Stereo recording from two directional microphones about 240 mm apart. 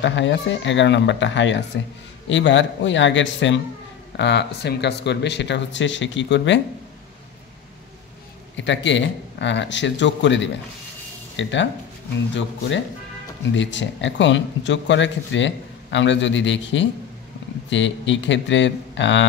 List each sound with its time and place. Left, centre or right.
0.0 s speech: left
8.5 s speech: left